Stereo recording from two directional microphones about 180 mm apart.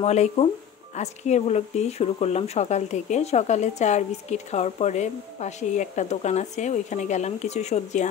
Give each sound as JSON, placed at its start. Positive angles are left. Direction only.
{"t": 0.0, "sound": "speech", "side_deg": 35}